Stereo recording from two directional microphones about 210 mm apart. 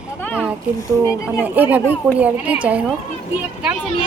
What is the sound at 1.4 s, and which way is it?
A woman's voice, 10° right (ahead or behind).